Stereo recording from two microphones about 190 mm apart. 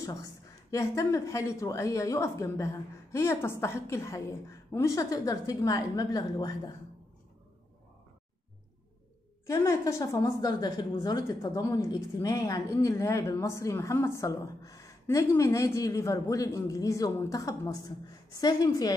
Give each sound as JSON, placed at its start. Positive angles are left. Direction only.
{"t": 0.0, "sound": "a woman's voice", "side_deg": 15}
{"t": 9.5, "sound": "a woman's voice", "side_deg": 15}